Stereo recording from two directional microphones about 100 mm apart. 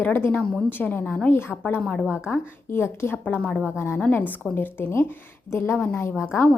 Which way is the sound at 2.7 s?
25° left (ahead or behind).